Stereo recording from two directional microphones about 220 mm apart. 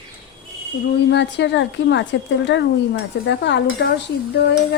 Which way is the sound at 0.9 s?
50° left (ahead or behind).